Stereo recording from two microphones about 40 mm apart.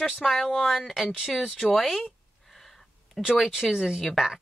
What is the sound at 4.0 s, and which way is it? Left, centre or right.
Speech, centre.